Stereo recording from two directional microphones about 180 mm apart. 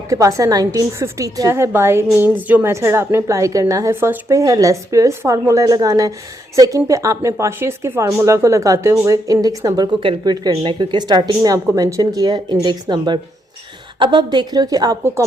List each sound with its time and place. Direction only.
0.1 s a woman's voice: 20° right (ahead or behind)